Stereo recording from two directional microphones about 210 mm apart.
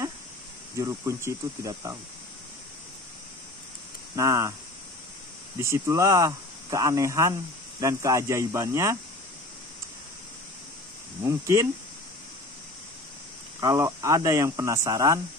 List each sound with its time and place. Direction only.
0.7 s speech: 15° right (ahead or behind)
4.1 s speech: 15° right (ahead or behind)
5.6 s speech: 15° right (ahead or behind)
11.2 s speech: 15° right (ahead or behind)
13.6 s speech: 15° right (ahead or behind)